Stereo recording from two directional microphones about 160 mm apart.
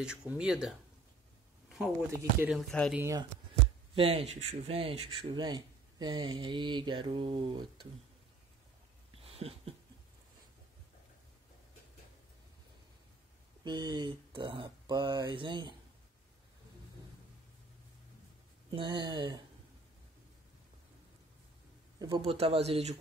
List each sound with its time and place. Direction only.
0.0 s speech: 5° right (ahead or behind)
3.9 s speech: 35° right (ahead or behind)
9.1 s a sound: 40° right (ahead or behind)
13.7 s speech: 30° right (ahead or behind)
18.7 s speech: 30° right (ahead or behind)
21.9 s a sound: 25° right (ahead or behind)
22.2 s speech: 35° right (ahead or behind)